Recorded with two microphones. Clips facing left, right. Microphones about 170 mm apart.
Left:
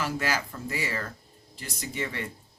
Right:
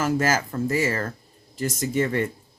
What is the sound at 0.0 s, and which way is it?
Speech, 45° right (ahead or behind).